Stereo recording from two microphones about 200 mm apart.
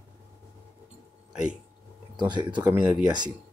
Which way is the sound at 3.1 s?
20° right (ahead or behind).